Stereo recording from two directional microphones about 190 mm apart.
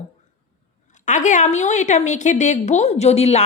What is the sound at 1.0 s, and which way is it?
A woman's voice, 40° left (ahead or behind).